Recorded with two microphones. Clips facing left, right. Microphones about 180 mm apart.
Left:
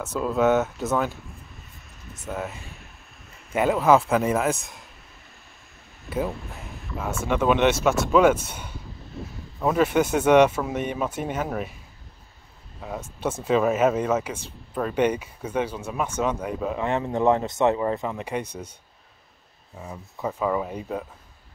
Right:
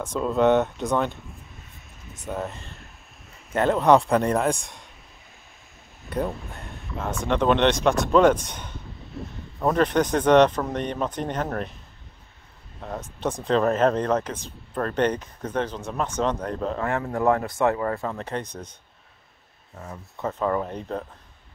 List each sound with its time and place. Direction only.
0.0 s a man's voice: 5° left (ahead or behind)
6.0 s speech: centre (ahead or behind)
12.8 s a man's voice: 5° left (ahead or behind)
16.8 s speech: 20° left (ahead or behind)
19.8 s speech: 10° left (ahead or behind)